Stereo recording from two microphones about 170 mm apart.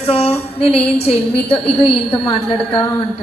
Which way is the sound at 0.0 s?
35° left (ahead or behind).